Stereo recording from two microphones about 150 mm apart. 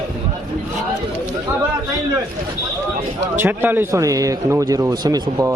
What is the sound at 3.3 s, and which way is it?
A man's voice, 15° right (ahead or behind).